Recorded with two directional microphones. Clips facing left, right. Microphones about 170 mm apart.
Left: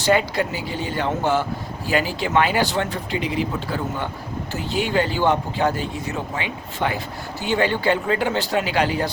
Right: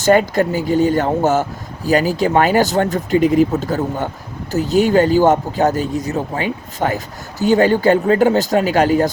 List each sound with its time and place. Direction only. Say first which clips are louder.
0.0 s speech: right 6 dB; 45° right (ahead or behind)